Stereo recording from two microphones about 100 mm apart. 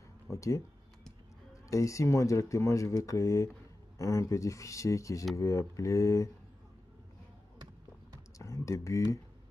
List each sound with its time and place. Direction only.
0.3 s speech: 30° left (ahead or behind)
8.4 s computer keyboard: 30° left (ahead or behind)